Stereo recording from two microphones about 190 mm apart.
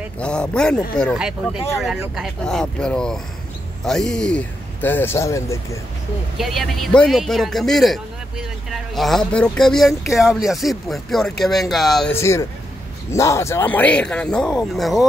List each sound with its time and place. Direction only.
0.2 s a man's voice: 5° left (ahead or behind)
6.3 s a man's voice: centre (ahead or behind)
12.1 s a man's voice: 15° left (ahead or behind)